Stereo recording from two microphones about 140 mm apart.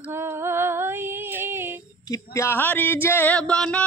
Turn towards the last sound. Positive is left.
turn(degrees=5)  # may be behind; listen again after turning